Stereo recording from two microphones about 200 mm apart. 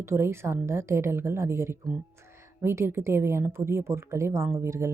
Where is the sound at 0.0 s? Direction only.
10° right (ahead or behind).